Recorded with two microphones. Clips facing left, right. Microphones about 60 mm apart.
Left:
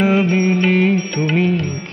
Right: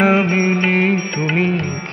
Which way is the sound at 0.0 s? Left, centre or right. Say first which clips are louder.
Right 1 dB; right.